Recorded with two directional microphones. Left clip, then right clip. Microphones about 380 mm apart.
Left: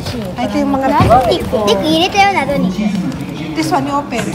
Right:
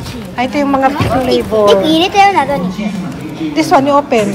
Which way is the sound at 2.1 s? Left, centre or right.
Centre.